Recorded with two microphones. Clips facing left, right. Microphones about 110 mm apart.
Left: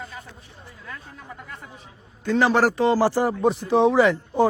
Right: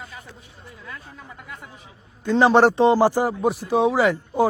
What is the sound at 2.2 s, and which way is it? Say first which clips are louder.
A man's voice: right 4 dB; 25° right (ahead or behind).